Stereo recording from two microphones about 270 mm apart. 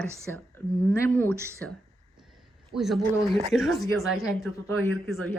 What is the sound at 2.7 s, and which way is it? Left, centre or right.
Speech, centre.